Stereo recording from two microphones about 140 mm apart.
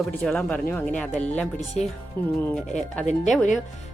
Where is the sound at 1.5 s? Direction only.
55° left (ahead or behind).